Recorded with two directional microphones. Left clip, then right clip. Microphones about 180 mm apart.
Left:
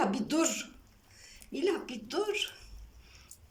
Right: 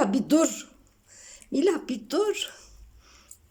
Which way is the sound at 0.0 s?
50° right (ahead or behind).